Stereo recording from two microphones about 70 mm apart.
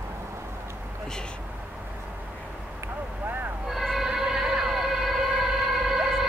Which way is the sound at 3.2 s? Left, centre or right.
Right.